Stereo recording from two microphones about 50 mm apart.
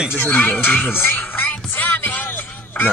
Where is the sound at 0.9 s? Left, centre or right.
Left.